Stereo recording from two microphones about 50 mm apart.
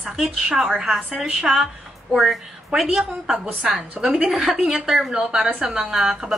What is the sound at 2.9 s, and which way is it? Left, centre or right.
A woman's voice, centre.